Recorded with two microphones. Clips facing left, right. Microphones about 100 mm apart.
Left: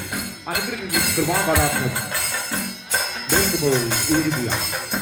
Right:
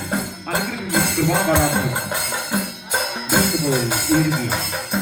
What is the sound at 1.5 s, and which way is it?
Speech, 20° right (ahead or behind).